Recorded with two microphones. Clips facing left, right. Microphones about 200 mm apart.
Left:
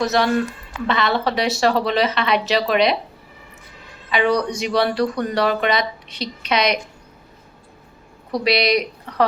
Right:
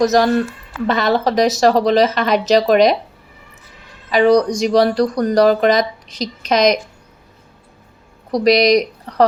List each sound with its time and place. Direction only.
0.0 s speech: 45° right (ahead or behind)
4.1 s speech: 40° right (ahead or behind)
8.3 s speech: 40° right (ahead or behind)